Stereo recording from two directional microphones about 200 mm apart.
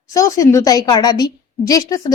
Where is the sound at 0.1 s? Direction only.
15° left (ahead or behind).